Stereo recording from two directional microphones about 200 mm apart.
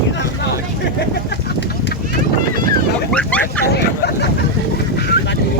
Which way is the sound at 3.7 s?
55° left (ahead or behind).